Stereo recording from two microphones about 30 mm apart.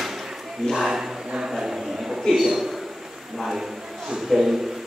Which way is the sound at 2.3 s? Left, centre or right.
Centre.